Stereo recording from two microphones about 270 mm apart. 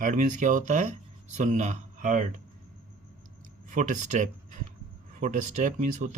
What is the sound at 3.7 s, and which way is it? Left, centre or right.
Speech, right.